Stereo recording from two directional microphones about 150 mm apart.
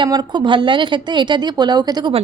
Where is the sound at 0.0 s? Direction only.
30° right (ahead or behind).